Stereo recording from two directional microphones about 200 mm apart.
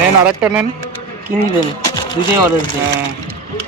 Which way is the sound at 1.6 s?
20° left (ahead or behind).